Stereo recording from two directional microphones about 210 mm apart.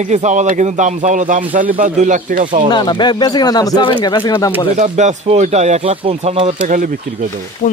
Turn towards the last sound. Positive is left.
turn(degrees=40)  # may be behind; listen again after turning